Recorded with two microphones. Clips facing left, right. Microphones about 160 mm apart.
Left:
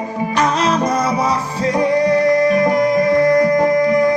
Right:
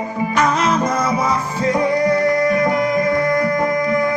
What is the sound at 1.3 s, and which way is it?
Music, 35° left (ahead or behind).